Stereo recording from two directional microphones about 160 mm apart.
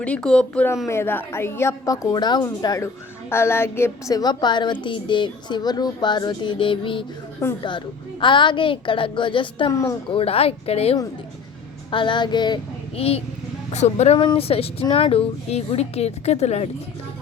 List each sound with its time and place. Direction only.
0.0 s a woman's voice: 5° left (ahead or behind); by 7.0 s 30° left (ahead or behind)
8.2 s a woman's voice: 30° left (ahead or behind)
13.0 s speech: 40° left (ahead or behind)